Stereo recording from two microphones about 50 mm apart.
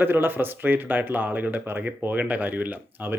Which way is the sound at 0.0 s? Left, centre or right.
Right.